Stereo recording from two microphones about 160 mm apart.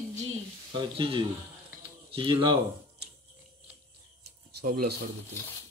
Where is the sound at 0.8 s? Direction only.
30° right (ahead or behind).